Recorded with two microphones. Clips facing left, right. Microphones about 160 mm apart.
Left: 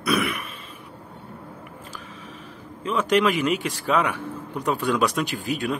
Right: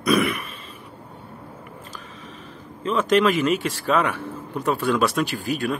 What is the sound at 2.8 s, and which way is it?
A man's voice, 10° left (ahead or behind).